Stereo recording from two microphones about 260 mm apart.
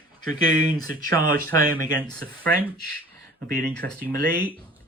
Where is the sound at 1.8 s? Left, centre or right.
Centre.